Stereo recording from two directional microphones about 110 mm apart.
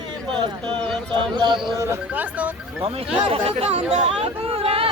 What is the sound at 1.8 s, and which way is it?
Speech, 25° right (ahead or behind).